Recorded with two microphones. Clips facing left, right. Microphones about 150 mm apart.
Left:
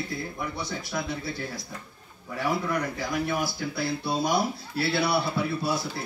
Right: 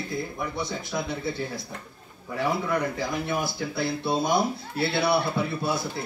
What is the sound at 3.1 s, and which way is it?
Speech, 25° right (ahead or behind).